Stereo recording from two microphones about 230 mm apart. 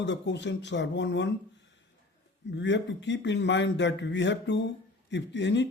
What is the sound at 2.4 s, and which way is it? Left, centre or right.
A man's voice, left.